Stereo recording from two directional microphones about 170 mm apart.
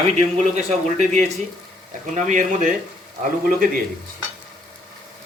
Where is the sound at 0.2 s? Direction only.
40° right (ahead or behind).